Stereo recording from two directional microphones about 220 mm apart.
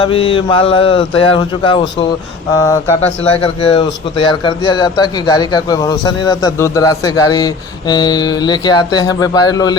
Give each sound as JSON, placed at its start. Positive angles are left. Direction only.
{"t": 0.0, "sound": "a man's voice", "side_deg": 25}
{"t": 2.6, "sound": "speech", "side_deg": 10}
{"t": 3.4, "sound": "a man's voice", "side_deg": 25}